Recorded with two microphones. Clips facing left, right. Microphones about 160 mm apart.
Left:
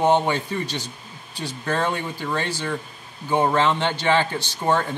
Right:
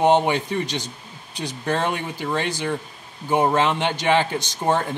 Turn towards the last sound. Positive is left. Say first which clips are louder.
# even
turn(degrees=-15)  # may be behind; listen again after turning